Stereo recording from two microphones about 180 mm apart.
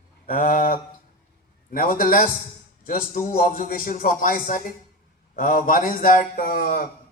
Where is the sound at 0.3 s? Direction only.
50° left (ahead or behind).